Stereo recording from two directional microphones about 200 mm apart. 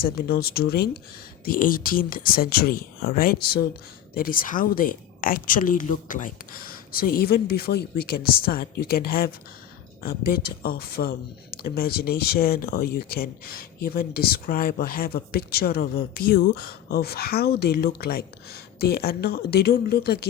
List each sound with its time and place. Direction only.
0.0 s speech: 50° left (ahead or behind)